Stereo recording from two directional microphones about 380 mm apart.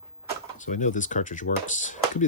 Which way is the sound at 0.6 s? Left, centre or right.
Centre.